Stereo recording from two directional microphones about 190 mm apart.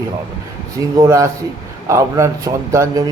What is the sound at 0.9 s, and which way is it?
Speech, 15° right (ahead or behind).